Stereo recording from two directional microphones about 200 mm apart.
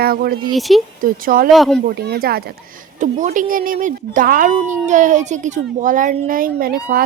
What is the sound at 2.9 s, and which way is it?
Speech, 40° right (ahead or behind).